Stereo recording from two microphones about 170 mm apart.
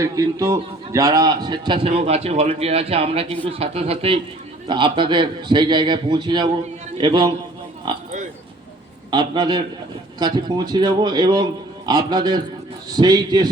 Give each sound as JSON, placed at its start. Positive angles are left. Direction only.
{"t": 0.0, "sound": "a man's voice", "side_deg": -20}
{"t": 9.0, "sound": "a man's voice", "side_deg": -25}